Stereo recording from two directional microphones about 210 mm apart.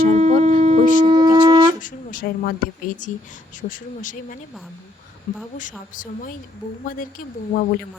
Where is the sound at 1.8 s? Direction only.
40° left (ahead or behind).